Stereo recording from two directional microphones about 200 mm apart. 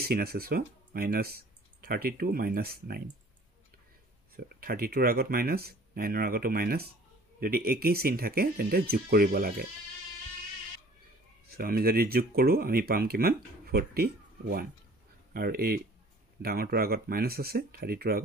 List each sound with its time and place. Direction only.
0.0 s speech: 50° right (ahead or behind)
4.4 s speech: 50° right (ahead or behind)
11.5 s speech: 50° right (ahead or behind)